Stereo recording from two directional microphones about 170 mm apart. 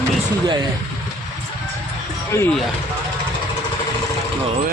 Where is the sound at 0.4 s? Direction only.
25° right (ahead or behind).